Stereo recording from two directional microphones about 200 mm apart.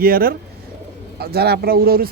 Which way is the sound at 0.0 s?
45° right (ahead or behind).